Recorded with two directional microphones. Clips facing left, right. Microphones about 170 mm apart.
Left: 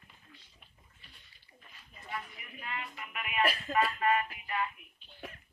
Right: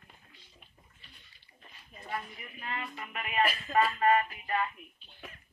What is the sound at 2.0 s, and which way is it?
Speech, 40° right (ahead or behind).